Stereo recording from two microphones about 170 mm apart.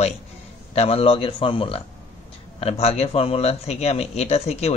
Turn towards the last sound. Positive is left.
turn(degrees=40)  # may be behind; listen again after turning